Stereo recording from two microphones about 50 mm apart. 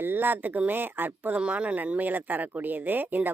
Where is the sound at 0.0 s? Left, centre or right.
Right.